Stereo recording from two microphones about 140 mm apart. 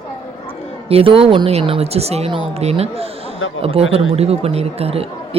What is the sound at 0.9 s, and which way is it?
Speech, 40° right (ahead or behind).